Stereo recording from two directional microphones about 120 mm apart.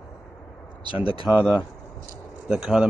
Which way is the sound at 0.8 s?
50° left (ahead or behind).